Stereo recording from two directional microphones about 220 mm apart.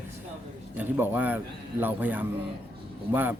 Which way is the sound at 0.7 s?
5° right (ahead or behind).